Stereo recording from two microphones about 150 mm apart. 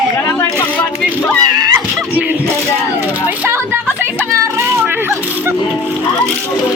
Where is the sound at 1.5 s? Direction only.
25° right (ahead or behind).